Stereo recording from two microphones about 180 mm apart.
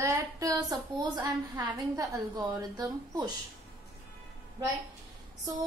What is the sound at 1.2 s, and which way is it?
A woman's voice, 20° right (ahead or behind).